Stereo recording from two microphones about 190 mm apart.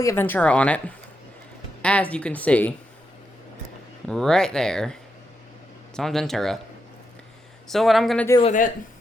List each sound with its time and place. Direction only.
0.0 s a woman's voice: 15° left (ahead or behind)
4.0 s speech: 5° left (ahead or behind)
6.0 s speech: centre (ahead or behind)
7.7 s speech: centre (ahead or behind)